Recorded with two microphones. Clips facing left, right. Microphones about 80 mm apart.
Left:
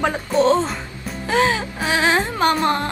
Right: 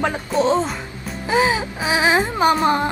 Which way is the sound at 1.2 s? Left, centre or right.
Centre.